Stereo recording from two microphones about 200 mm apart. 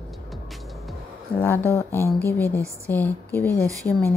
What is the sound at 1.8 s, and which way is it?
A woman's voice, 15° left (ahead or behind).